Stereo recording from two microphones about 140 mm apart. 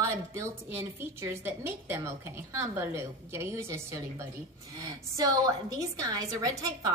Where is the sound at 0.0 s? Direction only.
20° right (ahead or behind).